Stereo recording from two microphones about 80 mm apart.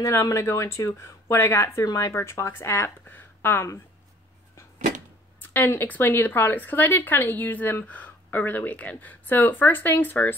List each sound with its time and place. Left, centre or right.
0.0 s speech: left
2.5 s speech: left
5.4 s speech: left